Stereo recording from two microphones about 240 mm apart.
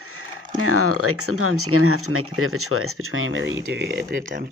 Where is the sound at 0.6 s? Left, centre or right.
Right.